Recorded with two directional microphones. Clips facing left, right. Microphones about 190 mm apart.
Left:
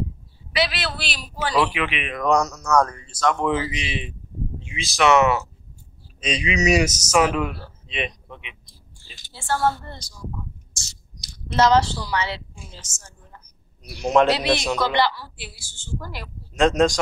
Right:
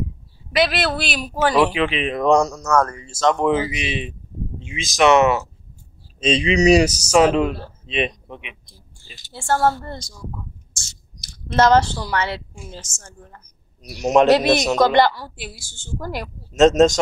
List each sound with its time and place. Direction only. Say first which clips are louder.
0.6 s a woman's voice: right 6 dB; 50° right (ahead or behind)
1.5 s speech: right 3 dB; 25° right (ahead or behind)
2.7 s speech: even; 5° right (ahead or behind)
3.1 s speech: right 4 dB; 20° right (ahead or behind)
9.3 s a woman's voice: right 4 dB; 50° right (ahead or behind)
14.0 s speech: right 3 dB; 20° right (ahead or behind)
14.3 s a woman's voice: right 6 dB; 45° right (ahead or behind)
16.5 s speech: right 5 dB; 20° right (ahead or behind)